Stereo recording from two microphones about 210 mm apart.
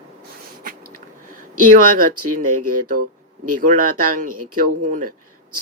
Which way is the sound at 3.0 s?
90° right.